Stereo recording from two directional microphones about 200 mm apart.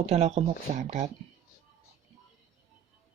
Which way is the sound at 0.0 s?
30° right (ahead or behind).